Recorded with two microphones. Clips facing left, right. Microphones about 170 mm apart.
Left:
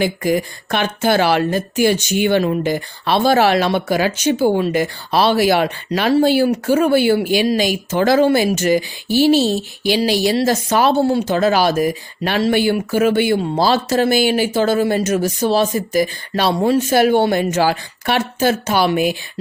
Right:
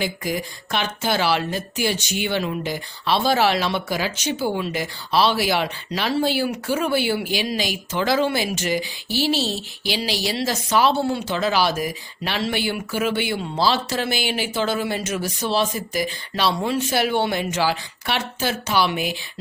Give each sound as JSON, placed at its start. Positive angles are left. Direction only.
{"t": 0.0, "sound": "speech", "side_deg": 55}